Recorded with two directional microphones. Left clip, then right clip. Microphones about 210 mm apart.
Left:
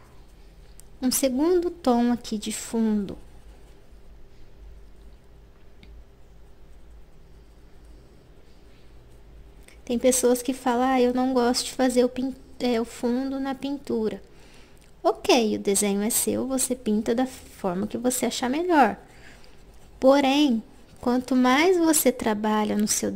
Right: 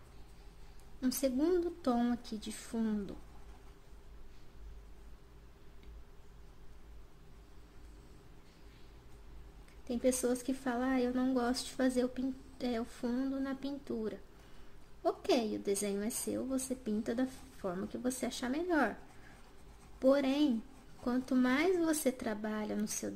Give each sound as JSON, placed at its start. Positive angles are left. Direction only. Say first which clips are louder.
{"t": 1.2, "sound": "speech", "louder": "left 10 dB", "side_deg": 40}
{"t": 9.8, "sound": "speech", "louder": "left 12 dB", "side_deg": 40}
{"t": 20.0, "sound": "speech", "louder": "left 11 dB", "side_deg": 40}